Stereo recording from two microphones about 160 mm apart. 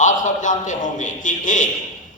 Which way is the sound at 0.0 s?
55° left (ahead or behind).